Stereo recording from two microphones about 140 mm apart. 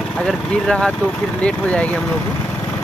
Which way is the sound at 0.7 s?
5° left (ahead or behind).